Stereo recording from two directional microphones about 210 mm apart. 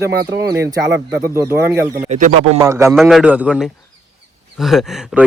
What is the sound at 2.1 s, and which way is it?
Speech, 35° right (ahead or behind).